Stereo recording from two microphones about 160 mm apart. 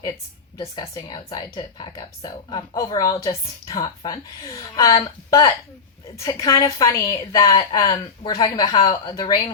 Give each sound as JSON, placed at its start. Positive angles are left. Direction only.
{"t": 0.5, "sound": "a woman's voice", "side_deg": 25}
{"t": 6.1, "sound": "a woman's voice", "side_deg": 20}